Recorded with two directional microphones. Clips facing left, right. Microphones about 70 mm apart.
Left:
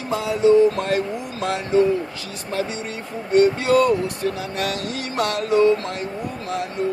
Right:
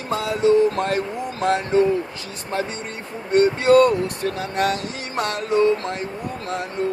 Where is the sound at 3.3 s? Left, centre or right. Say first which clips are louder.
Right 2 dB; right.